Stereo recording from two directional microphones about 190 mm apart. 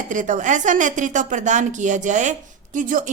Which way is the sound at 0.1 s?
40° right (ahead or behind).